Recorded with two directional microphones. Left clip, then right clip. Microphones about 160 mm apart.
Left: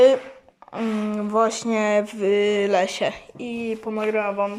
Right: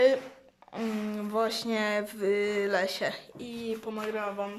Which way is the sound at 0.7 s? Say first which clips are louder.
Left 8 dB; 5° left (ahead or behind).